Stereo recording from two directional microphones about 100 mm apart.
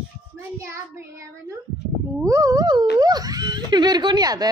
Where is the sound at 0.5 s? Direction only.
30° right (ahead or behind).